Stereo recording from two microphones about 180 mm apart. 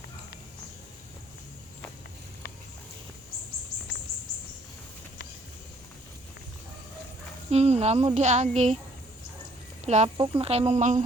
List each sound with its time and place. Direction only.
7.5 s a woman's voice: 35° right (ahead or behind)
9.8 s a woman's voice: 40° right (ahead or behind)